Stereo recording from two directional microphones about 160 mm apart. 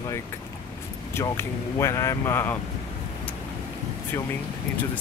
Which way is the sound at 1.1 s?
15° left (ahead or behind).